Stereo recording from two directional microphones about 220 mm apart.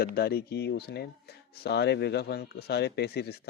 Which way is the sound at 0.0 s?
45° left (ahead or behind).